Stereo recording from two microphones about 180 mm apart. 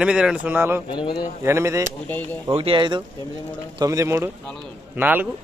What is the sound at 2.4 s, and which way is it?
Speech, 30° right (ahead or behind).